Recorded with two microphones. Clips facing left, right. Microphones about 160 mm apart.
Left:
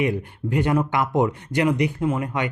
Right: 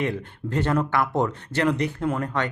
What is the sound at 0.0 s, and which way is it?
Speech, 10° left (ahead or behind).